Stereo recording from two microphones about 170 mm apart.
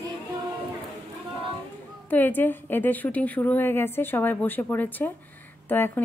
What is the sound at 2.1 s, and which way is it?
A woman's voice, 10° left (ahead or behind).